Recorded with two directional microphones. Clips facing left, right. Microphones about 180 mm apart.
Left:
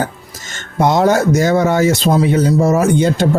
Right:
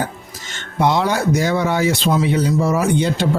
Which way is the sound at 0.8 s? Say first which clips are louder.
Left 5 dB; 45° left (ahead or behind).